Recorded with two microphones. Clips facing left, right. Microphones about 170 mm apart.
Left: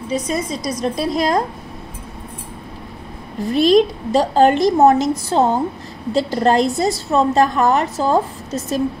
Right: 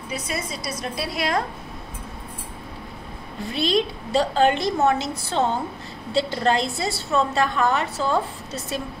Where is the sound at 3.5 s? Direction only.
45° left (ahead or behind).